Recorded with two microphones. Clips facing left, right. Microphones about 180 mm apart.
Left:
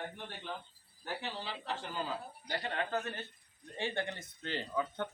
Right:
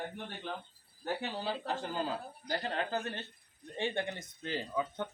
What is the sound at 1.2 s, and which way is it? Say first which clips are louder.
Speech: right 5 dB; 45° right (ahead or behind).